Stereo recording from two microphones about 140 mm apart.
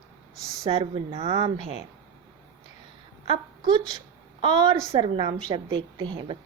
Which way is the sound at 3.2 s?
40° right (ahead or behind).